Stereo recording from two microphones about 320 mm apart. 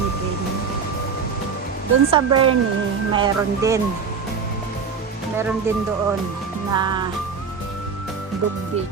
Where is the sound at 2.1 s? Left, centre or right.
Centre.